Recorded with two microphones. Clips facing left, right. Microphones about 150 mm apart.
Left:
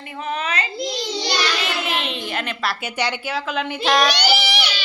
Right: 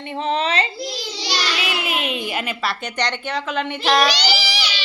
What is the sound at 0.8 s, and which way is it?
Child singing, 5° right (ahead or behind).